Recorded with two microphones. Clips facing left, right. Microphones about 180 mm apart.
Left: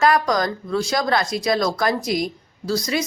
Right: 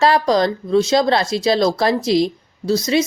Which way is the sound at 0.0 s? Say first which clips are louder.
Right 4 dB; 30° right (ahead or behind).